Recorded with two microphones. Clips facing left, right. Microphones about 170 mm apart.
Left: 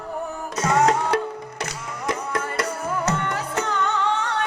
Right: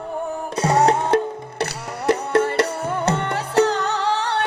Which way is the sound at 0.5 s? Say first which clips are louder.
Right 2 dB; 35° right (ahead or behind).